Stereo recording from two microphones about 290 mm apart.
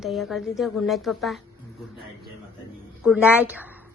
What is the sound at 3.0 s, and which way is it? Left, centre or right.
Speech, centre.